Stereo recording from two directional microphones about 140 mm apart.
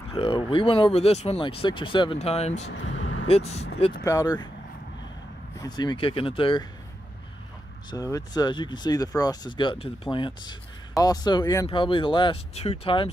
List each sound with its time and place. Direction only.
0.1 s speech: 40° left (ahead or behind)
4.0 s speech: 25° left (ahead or behind)
5.6 s speech: 30° left (ahead or behind)
7.9 s speech: 25° left (ahead or behind)